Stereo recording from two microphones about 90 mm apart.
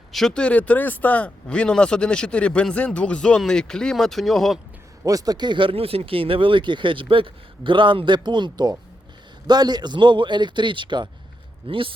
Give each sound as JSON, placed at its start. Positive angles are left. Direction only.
{"t": 0.1, "sound": "speech", "side_deg": 5}
{"t": 5.0, "sound": "speech", "side_deg": -45}
{"t": 11.6, "sound": "speech", "side_deg": -85}